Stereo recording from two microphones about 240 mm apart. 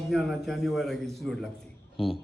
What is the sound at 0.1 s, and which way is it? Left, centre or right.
A man's voice, centre.